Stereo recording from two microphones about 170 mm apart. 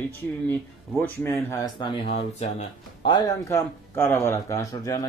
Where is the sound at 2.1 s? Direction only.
40° left (ahead or behind).